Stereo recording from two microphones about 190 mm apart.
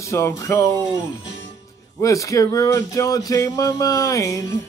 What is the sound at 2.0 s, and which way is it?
Speech, 15° left (ahead or behind).